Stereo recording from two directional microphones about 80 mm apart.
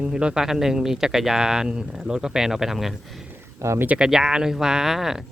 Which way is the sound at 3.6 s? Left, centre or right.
Right.